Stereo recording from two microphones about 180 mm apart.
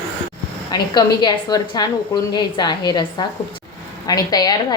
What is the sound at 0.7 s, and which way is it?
A woman's voice, 25° left (ahead or behind).